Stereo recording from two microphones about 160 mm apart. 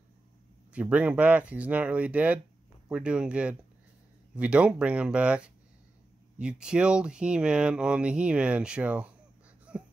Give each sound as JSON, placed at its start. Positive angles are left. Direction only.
{"t": 0.7, "sound": "speech", "side_deg": -10}
{"t": 9.7, "sound": "wheeze", "side_deg": -5}